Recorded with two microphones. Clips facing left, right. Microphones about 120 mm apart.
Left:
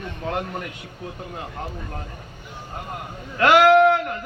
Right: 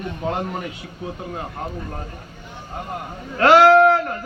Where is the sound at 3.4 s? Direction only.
30° right (ahead or behind).